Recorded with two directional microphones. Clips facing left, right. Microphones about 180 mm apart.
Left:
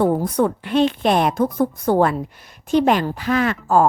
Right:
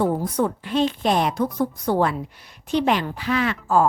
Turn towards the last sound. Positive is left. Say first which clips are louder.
# left 3 dB
turn(degrees=45)  # may be behind; listen again after turning